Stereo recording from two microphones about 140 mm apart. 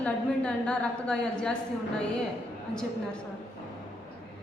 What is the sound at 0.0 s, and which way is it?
A woman's voice, 5° left (ahead or behind).